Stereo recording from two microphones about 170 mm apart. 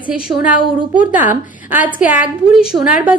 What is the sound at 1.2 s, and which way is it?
A woman's voice, 10° right (ahead or behind).